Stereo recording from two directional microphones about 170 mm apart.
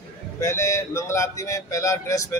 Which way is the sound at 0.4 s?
15° left (ahead or behind).